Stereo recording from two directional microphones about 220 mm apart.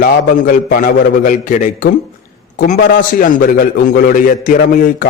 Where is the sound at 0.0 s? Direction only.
40° left (ahead or behind).